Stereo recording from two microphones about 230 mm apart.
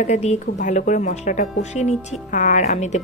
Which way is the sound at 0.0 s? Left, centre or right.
Left.